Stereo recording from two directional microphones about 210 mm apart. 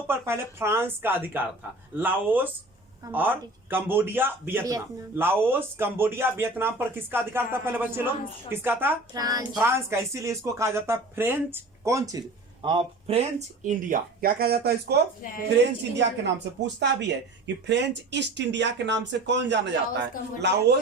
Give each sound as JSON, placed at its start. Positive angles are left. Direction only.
{"t": 0.1, "sound": "a man's voice", "side_deg": -10}